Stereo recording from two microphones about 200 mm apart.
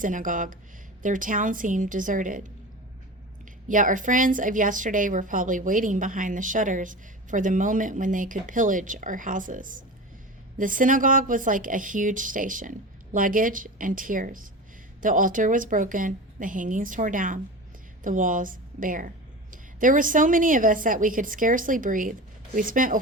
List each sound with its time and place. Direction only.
0.0 s a woman's voice: 40° right (ahead or behind)
3.7 s a woman's voice: 40° right (ahead or behind)